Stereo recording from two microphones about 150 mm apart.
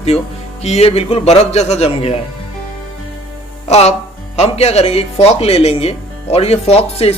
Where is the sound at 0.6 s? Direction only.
45° left (ahead or behind).